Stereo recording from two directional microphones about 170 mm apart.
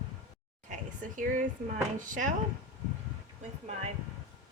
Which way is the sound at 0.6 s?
50° right (ahead or behind).